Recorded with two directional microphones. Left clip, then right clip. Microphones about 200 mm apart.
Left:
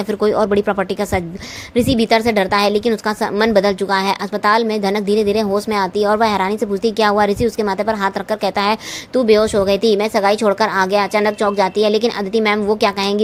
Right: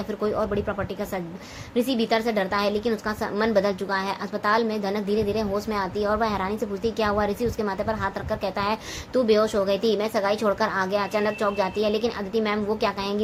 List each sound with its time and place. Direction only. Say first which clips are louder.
0.2 s a woman's voice: left 10 dB; 40° left (ahead or behind)
9.1 s a woman's voice: left 7 dB; 35° left (ahead or behind)